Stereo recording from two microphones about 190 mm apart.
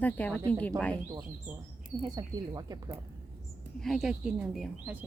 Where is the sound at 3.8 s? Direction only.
Centre (ahead or behind).